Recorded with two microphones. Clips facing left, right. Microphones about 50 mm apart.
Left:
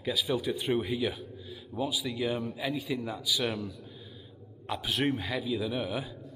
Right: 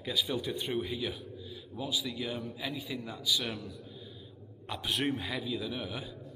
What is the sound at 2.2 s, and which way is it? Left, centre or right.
Speech, left.